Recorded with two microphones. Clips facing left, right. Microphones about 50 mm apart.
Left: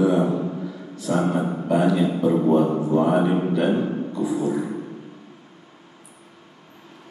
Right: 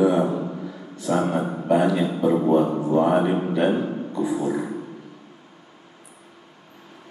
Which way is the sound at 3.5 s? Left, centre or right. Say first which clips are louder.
Even; centre.